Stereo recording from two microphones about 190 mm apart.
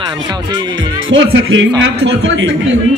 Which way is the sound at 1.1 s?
90° right.